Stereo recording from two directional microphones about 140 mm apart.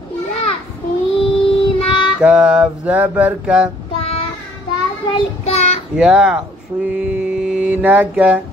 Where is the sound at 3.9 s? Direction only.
45° left (ahead or behind).